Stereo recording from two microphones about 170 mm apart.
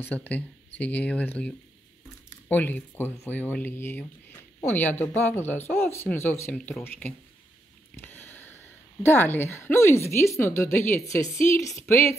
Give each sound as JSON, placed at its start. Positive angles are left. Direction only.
{"t": 0.0, "sound": "speech", "side_deg": 10}